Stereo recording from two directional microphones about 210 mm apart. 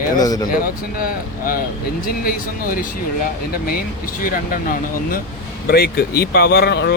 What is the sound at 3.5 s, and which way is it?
Speech, 45° left (ahead or behind).